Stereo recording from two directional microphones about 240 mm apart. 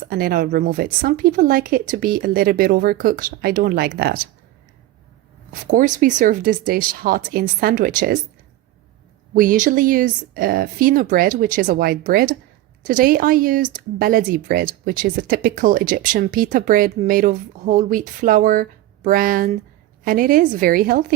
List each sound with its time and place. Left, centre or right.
0.1 s speech: right
5.6 s speech: right
9.3 s speech: right